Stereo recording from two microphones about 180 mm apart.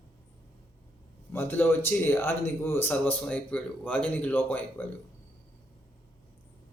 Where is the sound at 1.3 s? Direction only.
10° left (ahead or behind).